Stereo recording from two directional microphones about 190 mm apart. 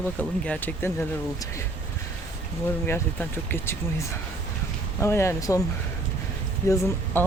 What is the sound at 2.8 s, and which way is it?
Speech, 10° left (ahead or behind).